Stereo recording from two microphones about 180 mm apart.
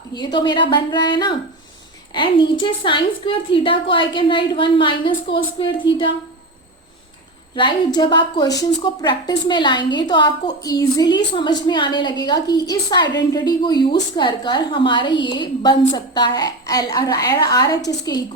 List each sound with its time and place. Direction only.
0.1 s a woman's voice: 25° left (ahead or behind)
7.9 s a woman's voice: 25° left (ahead or behind)